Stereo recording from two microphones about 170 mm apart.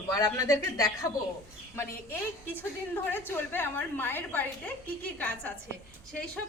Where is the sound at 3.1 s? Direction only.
10° left (ahead or behind).